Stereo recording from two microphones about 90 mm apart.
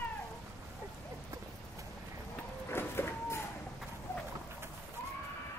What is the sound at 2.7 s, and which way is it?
Vehicle, 25° left (ahead or behind).